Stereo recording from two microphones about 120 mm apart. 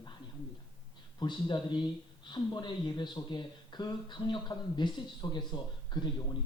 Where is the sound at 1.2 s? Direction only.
40° left (ahead or behind).